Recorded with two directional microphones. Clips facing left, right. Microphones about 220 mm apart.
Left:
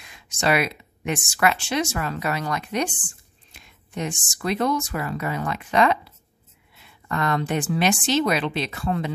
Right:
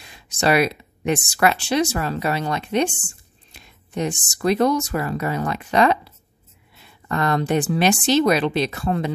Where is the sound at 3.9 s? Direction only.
35° right (ahead or behind).